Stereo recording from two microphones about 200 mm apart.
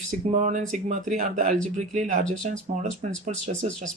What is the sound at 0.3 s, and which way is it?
Speech, 35° right (ahead or behind).